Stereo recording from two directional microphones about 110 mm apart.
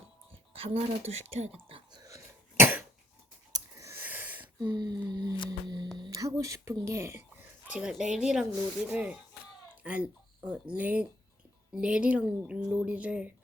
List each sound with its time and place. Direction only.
0.5 s speech: 60° right (ahead or behind); by 1.5 s 75° right (ahead or behind)
1.6 s whispering: 55° right (ahead or behind)
2.0 s cough: 30° right (ahead or behind)
3.5 s a sound: 30° right (ahead or behind)
3.9 s a sound: 15° right (ahead or behind)
4.7 s music: 40° right (ahead or behind)
6.0 s speech: 35° right (ahead or behind)
7.7 s speech: 10° right (ahead or behind)